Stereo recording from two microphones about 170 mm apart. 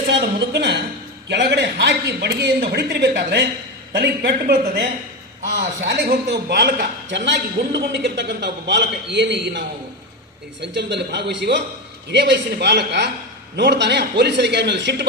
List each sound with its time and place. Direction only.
0.1 s a sound: 80° right
1.3 s a man's voice: 80° right
3.9 s a woman's voice: 65° right (ahead or behind)
5.9 s a man's voice: 75° right (ahead or behind)
13.6 s a man's voice: 90° right